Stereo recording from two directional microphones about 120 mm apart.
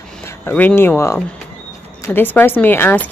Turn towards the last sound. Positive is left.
turn(degrees=20)  # may be behind; listen again after turning